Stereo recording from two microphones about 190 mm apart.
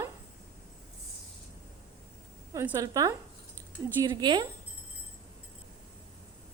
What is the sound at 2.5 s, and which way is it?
A woman's voice, 15° right (ahead or behind).